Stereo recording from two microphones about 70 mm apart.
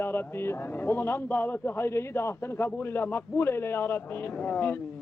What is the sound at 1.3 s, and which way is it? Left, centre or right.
A man's voice, left.